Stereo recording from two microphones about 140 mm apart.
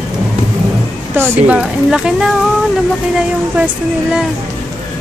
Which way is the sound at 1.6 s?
5° right (ahead or behind).